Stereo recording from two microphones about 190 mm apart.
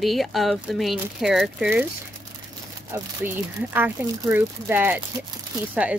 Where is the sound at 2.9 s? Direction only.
15° right (ahead or behind).